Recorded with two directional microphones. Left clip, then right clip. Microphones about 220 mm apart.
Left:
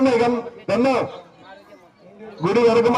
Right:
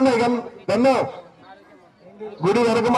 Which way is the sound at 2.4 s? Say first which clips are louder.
Left 3 dB; 50° right (ahead or behind).